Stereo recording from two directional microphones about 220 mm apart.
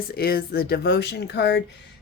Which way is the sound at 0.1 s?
45° left (ahead or behind).